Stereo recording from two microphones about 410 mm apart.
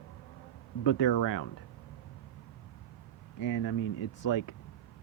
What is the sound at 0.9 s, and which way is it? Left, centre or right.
Speech, left.